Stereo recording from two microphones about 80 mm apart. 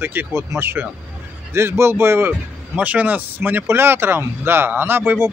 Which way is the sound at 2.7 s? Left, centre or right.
Centre.